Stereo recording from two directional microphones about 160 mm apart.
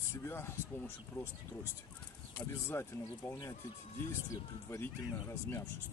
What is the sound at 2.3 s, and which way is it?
Speech, 15° left (ahead or behind).